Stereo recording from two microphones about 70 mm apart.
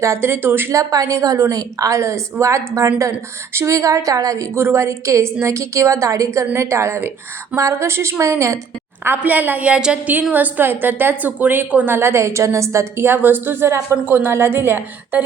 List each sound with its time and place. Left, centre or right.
0.0 s a woman's voice: right
0.7 s a woman's voice: right
4.5 s a woman's voice: right
9.0 s a woman's voice: right
11.9 s a woman's voice: right